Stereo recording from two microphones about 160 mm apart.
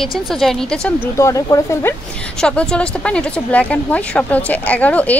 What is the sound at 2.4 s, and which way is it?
Speech, 5° left (ahead or behind).